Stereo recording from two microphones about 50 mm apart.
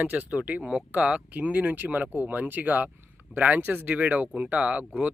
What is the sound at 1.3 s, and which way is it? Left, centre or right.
Speech, right.